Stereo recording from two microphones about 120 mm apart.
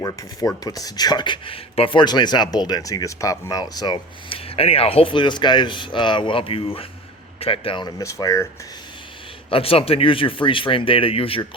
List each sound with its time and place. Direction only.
0.0 s speech: 30° left (ahead or behind)
9.5 s speech: 50° left (ahead or behind)